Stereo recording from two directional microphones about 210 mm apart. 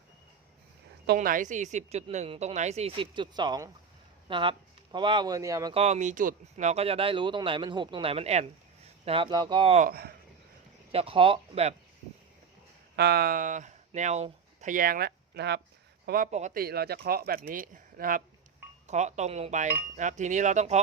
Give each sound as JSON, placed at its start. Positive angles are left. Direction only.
{"t": 1.0, "sound": "a woman's voice", "side_deg": -45}
{"t": 5.7, "sound": "speech", "side_deg": -30}
{"t": 9.8, "sound": "speech", "side_deg": -45}
{"t": 10.9, "sound": "speech", "side_deg": -25}
{"t": 13.0, "sound": "speech", "side_deg": -50}
{"t": 16.0, "sound": "a woman's voice", "side_deg": -40}
{"t": 16.6, "sound": "a woman's voice", "side_deg": -50}